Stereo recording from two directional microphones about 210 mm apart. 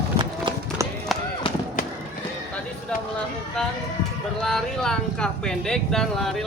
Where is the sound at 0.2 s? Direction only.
25° right (ahead or behind).